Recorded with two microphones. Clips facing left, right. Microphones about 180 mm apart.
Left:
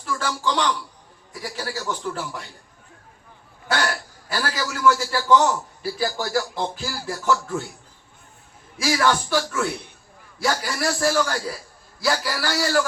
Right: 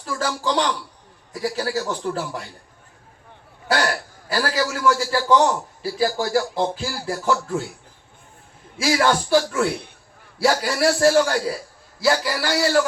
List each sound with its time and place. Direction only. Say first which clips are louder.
0.0 s a man's voice: right 1 dB; 35° right (ahead or behind)
3.7 s a man's voice: right 3 dB; 35° right (ahead or behind)
8.8 s a man's voice: right 2 dB; 30° right (ahead or behind)